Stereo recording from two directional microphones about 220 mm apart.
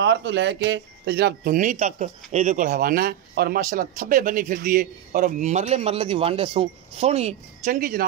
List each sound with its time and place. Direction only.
0.0 s speech: 50° right (ahead or behind)